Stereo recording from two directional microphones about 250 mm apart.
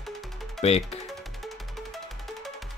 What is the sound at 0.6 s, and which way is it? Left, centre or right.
Speech, left.